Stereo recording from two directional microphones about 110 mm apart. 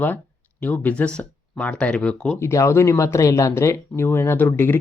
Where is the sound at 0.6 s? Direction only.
15° left (ahead or behind).